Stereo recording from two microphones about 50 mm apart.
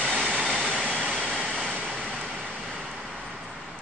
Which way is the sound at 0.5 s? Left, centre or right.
Right.